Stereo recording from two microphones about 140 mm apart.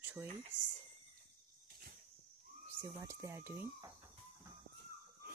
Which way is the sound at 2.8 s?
25° right (ahead or behind).